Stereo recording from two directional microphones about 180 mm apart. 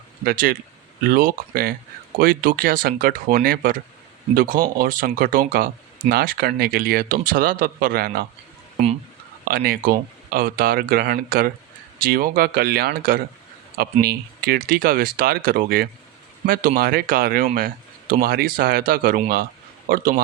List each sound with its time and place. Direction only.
0.3 s speech: 55° right (ahead or behind)
9.4 s speech: 55° right (ahead or behind)